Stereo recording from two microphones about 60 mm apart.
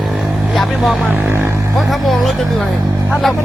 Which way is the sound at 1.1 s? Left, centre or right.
Right.